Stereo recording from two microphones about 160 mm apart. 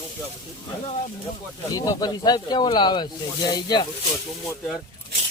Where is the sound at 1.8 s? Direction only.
25° left (ahead or behind).